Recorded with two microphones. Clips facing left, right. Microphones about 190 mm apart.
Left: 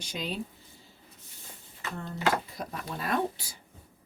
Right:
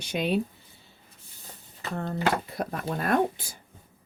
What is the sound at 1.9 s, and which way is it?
Speech, 60° right (ahead or behind).